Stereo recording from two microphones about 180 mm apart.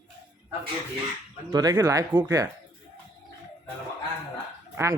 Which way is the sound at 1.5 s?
20° right (ahead or behind).